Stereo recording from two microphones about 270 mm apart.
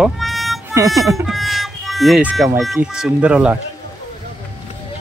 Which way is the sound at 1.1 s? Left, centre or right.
Centre.